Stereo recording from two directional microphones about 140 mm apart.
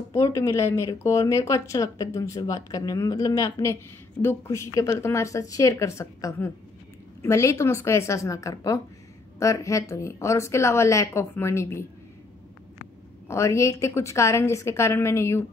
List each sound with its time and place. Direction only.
0.1 s speech: 20° left (ahead or behind)
13.3 s speech: 20° left (ahead or behind)